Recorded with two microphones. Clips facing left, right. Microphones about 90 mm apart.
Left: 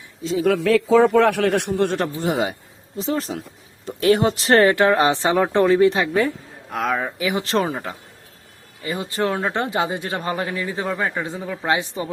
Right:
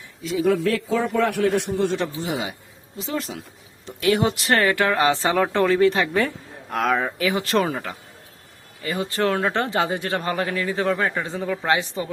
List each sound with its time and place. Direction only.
0.2 s speech: 30° left (ahead or behind)
0.4 s a man's voice: 90° left; by 2.6 s 50° left (ahead or behind)
3.0 s speech: 35° left (ahead or behind); by 6.1 s 20° left (ahead or behind)
6.1 s speech: centre (ahead or behind)
7.2 s speech: 20° left (ahead or behind)